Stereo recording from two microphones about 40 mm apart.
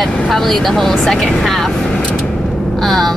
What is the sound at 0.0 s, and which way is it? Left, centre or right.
Speech, centre.